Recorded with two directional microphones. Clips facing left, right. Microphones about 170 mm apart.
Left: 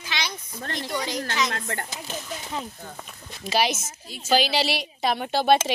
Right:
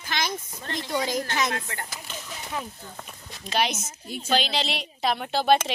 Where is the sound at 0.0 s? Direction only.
50° right (ahead or behind).